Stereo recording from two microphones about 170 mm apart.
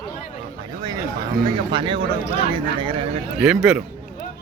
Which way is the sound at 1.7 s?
30° right (ahead or behind).